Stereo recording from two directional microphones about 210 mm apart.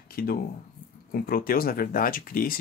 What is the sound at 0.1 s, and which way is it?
Speech, 45° left (ahead or behind).